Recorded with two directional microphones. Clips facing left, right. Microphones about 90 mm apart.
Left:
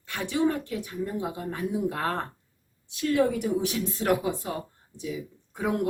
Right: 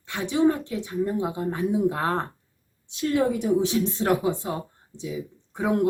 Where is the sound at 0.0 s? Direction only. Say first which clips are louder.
Right 4 dB; 20° right (ahead or behind).